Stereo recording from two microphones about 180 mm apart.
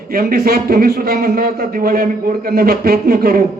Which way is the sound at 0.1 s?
55° right (ahead or behind).